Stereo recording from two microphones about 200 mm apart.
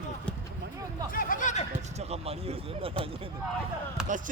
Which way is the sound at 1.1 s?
45° left (ahead or behind).